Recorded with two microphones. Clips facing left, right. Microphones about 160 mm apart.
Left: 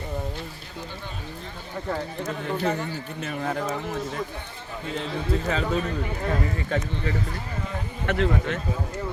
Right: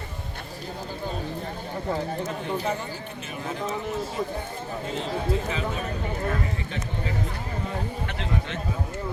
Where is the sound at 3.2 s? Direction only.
55° left (ahead or behind).